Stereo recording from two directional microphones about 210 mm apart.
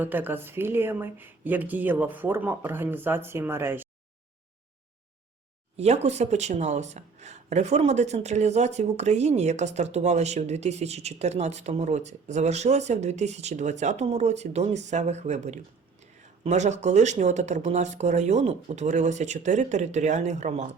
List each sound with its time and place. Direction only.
0.0 s speech: 10° right (ahead or behind)
5.7 s speech: 30° right (ahead or behind)